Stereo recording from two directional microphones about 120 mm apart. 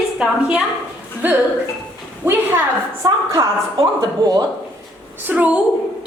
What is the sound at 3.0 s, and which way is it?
Speech, 30° right (ahead or behind).